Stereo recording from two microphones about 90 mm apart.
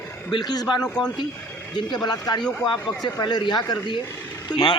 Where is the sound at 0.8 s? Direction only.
10° left (ahead or behind).